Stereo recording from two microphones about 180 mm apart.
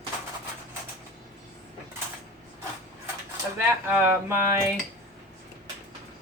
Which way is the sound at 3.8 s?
10° right (ahead or behind).